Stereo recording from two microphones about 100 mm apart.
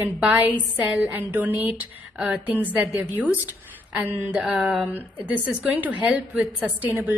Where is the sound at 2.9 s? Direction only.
20° right (ahead or behind).